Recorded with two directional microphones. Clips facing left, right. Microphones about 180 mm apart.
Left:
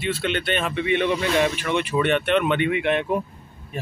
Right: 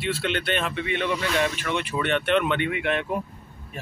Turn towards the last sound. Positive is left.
turn(degrees=20)  # may be behind; listen again after turning